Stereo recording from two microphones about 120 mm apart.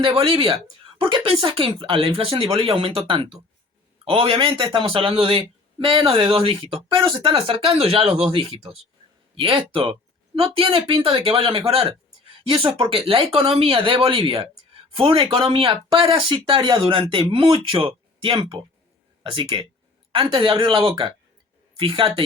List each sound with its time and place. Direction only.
0.0 s speech: 50° right (ahead or behind)